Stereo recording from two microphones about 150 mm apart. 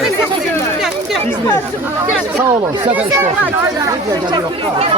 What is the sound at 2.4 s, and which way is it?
Speech, 15° right (ahead or behind).